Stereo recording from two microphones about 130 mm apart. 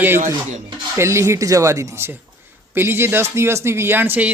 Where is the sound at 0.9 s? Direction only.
20° right (ahead or behind).